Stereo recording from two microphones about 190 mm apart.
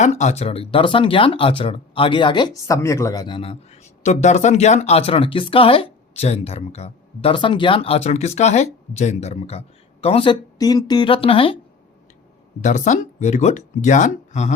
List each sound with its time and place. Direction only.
0.0 s speech: 35° left (ahead or behind)
12.6 s speech: 40° left (ahead or behind)